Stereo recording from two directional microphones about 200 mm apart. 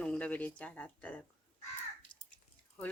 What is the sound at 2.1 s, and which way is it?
Drip, 25° left (ahead or behind).